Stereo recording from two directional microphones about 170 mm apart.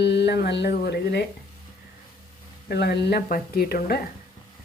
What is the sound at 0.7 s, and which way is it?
Speech, 70° left (ahead or behind).